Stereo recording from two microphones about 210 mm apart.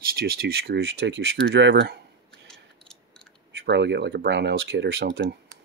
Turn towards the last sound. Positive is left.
turn(degrees=-50)  # may be behind; listen again after turning